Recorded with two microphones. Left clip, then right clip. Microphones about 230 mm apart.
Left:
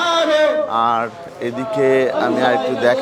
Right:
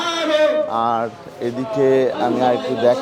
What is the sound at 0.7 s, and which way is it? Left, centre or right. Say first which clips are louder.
A man's voice: left 2 dB; left.